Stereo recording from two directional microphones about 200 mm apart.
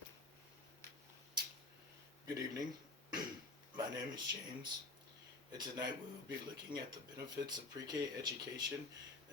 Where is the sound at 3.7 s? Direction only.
20° right (ahead or behind).